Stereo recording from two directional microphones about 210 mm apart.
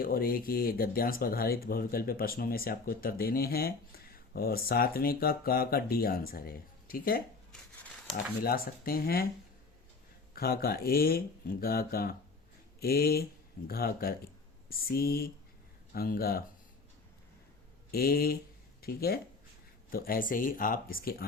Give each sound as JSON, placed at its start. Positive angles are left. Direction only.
{"t": 0.0, "sound": "speech", "side_deg": 45}
{"t": 10.3, "sound": "speech", "side_deg": 45}
{"t": 17.9, "sound": "speech", "side_deg": 45}